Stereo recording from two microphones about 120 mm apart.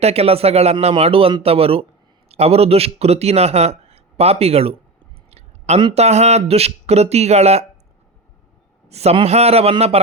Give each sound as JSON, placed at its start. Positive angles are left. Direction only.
{"t": 0.0, "sound": "a man's voice", "side_deg": -55}
{"t": 5.3, "sound": "a sound", "side_deg": -65}
{"t": 5.9, "sound": "a man's voice", "side_deg": -65}
{"t": 8.9, "sound": "a man's voice", "side_deg": -60}